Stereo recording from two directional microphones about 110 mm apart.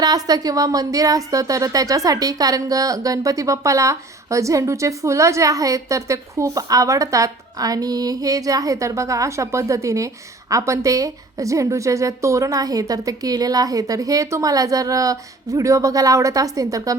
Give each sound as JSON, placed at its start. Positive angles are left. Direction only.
{"t": 0.0, "sound": "a woman's voice", "side_deg": -35}